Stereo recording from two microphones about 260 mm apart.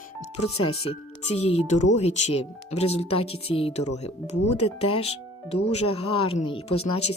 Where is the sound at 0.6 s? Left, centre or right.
Left.